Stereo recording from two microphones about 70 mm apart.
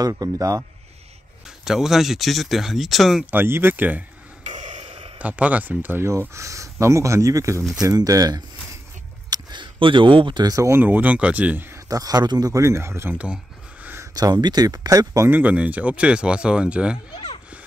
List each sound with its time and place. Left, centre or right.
0.0 s speech: right
1.6 s speech: centre
3.3 s speech: right
5.2 s speech: right
6.0 s speech: right
7.8 s speech: right
9.3 s a sound: right
10.4 s speech: right
10.7 s speech: right
11.9 s speech: right
12.6 s speech: right
14.1 s speech: right
15.2 s speech: right